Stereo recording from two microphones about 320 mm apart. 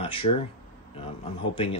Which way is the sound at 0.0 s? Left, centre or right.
Centre.